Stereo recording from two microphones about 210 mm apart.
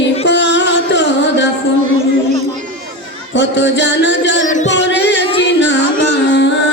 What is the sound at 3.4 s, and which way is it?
Music, 55° left (ahead or behind).